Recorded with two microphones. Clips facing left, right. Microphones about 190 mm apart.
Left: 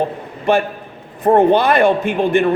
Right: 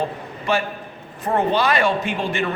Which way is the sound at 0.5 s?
55° left (ahead or behind).